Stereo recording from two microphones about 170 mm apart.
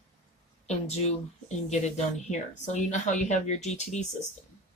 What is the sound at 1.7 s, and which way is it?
Speech, 45° left (ahead or behind).